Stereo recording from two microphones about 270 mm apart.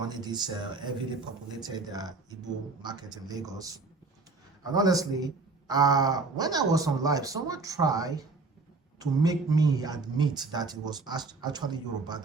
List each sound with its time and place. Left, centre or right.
0.0 s speech: centre